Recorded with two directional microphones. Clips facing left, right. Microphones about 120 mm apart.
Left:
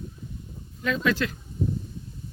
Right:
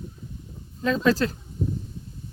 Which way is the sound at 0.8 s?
35° right (ahead or behind).